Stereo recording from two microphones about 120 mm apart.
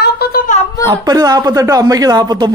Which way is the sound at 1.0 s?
30° right (ahead or behind).